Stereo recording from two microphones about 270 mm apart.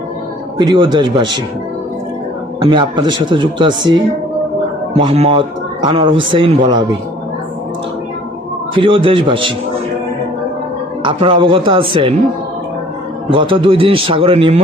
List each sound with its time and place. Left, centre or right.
0.6 s speech: centre
2.6 s speech: centre
4.9 s a man's voice: right
8.7 s a man's voice: centre
11.0 s a man's voice: centre
13.3 s a man's voice: centre